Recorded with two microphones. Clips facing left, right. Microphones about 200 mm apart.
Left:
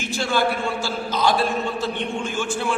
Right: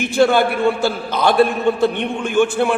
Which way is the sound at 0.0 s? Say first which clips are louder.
Right 8 dB; 60° right (ahead or behind).